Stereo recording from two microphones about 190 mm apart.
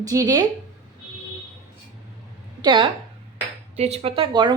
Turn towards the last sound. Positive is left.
turn(degrees=-25)  # may be behind; listen again after turning